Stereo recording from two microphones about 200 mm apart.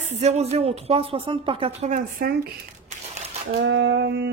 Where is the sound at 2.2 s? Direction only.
50° right (ahead or behind).